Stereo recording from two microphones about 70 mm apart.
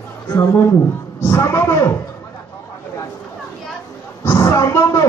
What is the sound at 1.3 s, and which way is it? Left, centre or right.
Speech, left.